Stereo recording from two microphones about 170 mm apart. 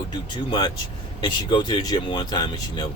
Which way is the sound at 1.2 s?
25° left (ahead or behind).